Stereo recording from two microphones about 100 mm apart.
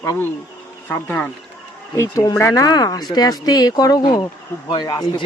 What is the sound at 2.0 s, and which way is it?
A man's voice, 30° left (ahead or behind).